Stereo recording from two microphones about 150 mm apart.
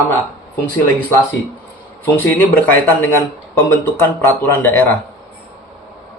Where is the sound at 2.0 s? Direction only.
15° left (ahead or behind).